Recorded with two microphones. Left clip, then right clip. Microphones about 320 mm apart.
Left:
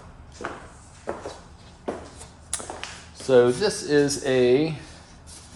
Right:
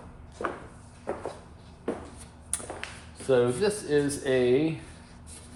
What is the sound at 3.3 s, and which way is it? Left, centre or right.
Speech, left.